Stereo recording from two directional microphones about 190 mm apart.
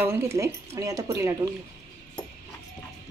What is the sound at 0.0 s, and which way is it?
Speech, 15° right (ahead or behind).